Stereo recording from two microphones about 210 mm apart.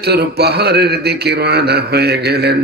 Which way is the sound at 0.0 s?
50° right (ahead or behind).